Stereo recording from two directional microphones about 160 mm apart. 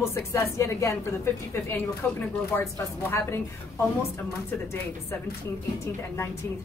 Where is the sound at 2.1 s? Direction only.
15° left (ahead or behind).